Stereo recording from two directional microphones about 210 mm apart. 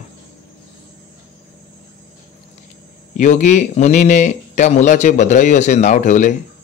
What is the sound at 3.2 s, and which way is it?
Speech, 35° left (ahead or behind).